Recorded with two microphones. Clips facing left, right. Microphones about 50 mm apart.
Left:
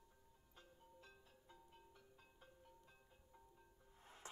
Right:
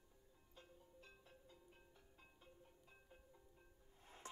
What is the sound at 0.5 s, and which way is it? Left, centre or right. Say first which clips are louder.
Music: right 1 dB; right.